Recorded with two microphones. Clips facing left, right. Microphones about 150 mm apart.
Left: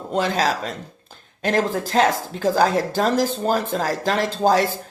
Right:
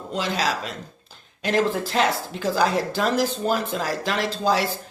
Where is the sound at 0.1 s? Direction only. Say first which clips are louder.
Left 4 dB; 50° left (ahead or behind).